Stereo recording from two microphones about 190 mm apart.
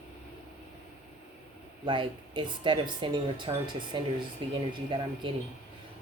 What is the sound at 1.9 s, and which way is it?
Speech, 25° right (ahead or behind).